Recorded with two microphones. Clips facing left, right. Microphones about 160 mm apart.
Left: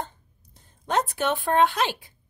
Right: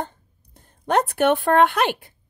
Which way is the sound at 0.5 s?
60° right (ahead or behind).